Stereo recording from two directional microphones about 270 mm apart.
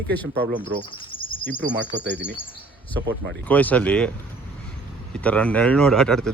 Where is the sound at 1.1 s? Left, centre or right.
Centre.